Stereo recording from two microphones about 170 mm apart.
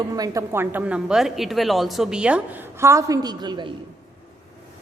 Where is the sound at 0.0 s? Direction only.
20° right (ahead or behind).